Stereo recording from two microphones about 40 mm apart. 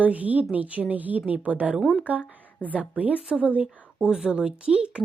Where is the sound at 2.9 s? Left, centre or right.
Right.